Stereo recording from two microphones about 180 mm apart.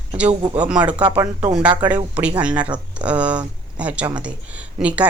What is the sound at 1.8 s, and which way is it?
Speech, 25° right (ahead or behind).